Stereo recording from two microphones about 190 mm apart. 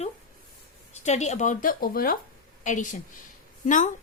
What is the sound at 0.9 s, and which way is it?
A woman's voice, 35° left (ahead or behind).